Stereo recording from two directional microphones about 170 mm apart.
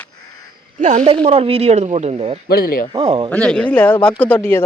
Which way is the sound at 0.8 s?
45° right (ahead or behind).